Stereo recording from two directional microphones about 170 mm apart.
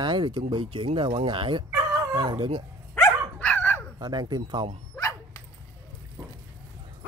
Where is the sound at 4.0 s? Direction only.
25° right (ahead or behind).